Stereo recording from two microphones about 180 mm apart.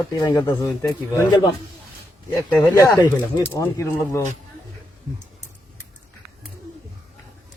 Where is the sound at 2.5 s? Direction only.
15° left (ahead or behind).